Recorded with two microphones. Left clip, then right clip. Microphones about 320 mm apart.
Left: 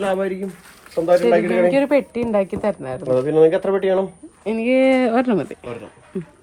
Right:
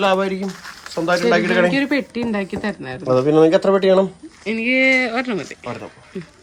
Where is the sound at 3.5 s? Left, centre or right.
Right.